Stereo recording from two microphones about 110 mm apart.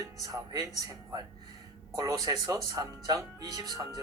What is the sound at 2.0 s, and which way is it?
Speech, 30° right (ahead or behind).